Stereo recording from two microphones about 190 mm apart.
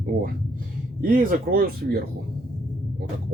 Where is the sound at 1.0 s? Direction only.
45° right (ahead or behind).